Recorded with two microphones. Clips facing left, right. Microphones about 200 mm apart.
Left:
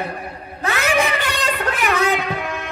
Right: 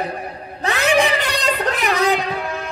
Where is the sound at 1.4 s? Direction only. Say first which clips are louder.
Right 2 dB; 35° right (ahead or behind).